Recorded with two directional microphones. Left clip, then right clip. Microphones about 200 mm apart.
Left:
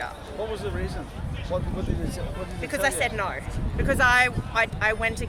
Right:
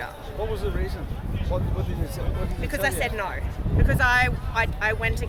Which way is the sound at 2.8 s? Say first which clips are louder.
Left 1 dB; 25° left (ahead or behind).